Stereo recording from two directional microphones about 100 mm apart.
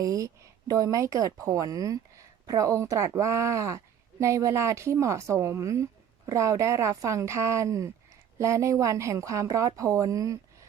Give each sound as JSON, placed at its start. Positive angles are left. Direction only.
{"t": 0.0, "sound": "a woman's voice", "side_deg": -35}